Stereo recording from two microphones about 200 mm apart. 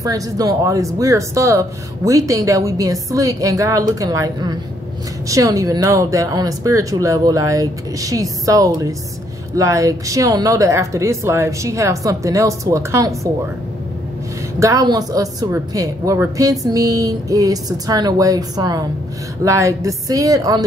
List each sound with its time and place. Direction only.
0.0 s speech: 15° right (ahead or behind)
14.6 s speech: 15° right (ahead or behind)